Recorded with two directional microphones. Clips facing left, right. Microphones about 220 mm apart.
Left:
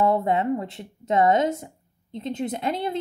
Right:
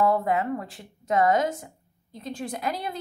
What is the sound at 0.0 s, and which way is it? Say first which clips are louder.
A woman's voice: left 2 dB; 25° left (ahead or behind).